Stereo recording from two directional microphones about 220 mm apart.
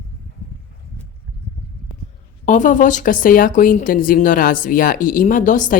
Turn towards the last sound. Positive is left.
turn(degrees=35)  # may be behind; listen again after turning